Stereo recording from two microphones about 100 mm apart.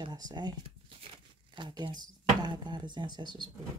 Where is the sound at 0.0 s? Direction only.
45° right (ahead or behind).